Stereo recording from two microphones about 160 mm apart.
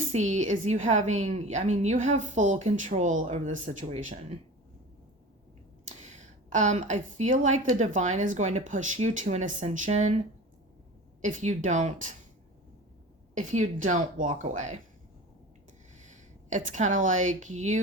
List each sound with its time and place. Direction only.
0.1 s a woman's voice: 45° right (ahead or behind)
6.5 s a woman's voice: 50° right (ahead or behind)
11.2 s a woman's voice: 50° right (ahead or behind)
13.3 s a woman's voice: 50° right (ahead or behind)
16.0 s a woman's voice: 50° right (ahead or behind)